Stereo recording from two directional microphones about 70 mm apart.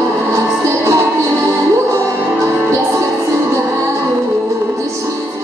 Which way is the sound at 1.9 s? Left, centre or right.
Right.